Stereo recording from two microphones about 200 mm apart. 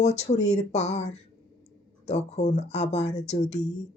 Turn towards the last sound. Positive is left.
turn(degrees=35)  # may be behind; listen again after turning